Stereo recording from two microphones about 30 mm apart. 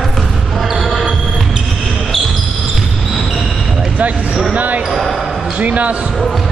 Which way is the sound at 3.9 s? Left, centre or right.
Right.